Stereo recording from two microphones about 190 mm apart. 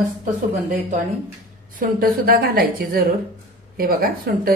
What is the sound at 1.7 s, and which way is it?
A woman's voice, 50° right (ahead or behind).